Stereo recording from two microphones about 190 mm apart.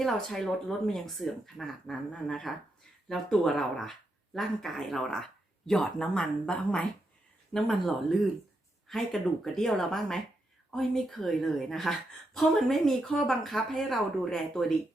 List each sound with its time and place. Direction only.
0.0 s a woman's voice: centre (ahead or behind)